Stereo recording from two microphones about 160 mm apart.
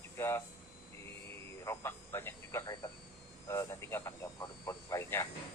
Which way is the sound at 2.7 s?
30° left (ahead or behind).